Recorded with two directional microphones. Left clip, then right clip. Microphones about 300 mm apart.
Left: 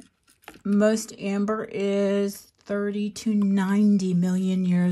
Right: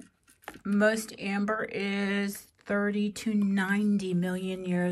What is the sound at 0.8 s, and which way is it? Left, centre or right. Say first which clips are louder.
Speech: left 3 dB; centre.